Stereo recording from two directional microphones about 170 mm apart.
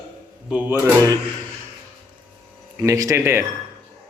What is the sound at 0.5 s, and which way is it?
Speech, 10° right (ahead or behind).